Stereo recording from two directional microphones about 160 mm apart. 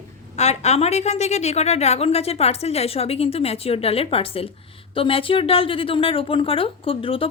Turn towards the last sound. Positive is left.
turn(degrees=35)  # may be behind; listen again after turning